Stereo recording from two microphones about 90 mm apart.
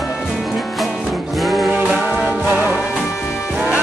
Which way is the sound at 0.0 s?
Centre (ahead or behind).